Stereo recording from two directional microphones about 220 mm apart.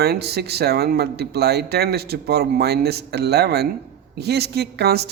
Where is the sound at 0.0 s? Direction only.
45° right (ahead or behind).